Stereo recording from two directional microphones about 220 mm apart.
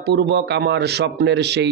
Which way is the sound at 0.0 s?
50° right (ahead or behind).